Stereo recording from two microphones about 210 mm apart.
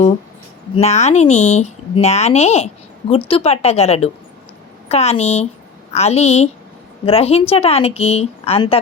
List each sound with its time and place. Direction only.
0.8 s a woman's voice: 30° left (ahead or behind)